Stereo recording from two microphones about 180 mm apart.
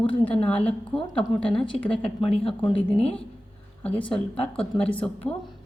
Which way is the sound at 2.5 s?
30° left (ahead or behind).